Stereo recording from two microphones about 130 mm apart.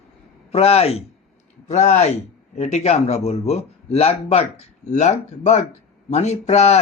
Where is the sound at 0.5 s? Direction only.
50° left (ahead or behind).